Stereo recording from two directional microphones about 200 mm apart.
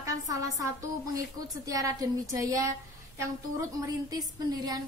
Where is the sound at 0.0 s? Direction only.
15° right (ahead or behind).